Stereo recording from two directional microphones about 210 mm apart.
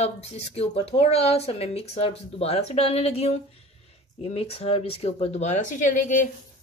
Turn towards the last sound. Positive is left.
turn(degrees=35)  # may be behind; listen again after turning